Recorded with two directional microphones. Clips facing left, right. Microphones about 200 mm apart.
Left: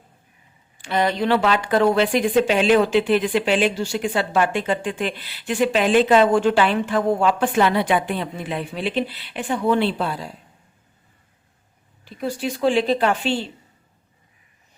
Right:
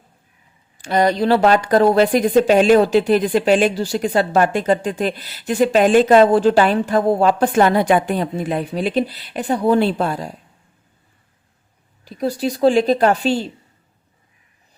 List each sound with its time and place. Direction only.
0.8 s speech: 40° right (ahead or behind)
12.0 s speech: 40° right (ahead or behind)